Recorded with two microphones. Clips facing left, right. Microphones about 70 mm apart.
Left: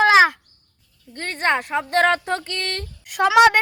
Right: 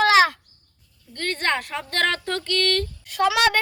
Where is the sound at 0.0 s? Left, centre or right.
Centre.